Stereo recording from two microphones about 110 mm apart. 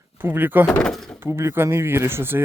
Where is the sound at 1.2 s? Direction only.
25° right (ahead or behind).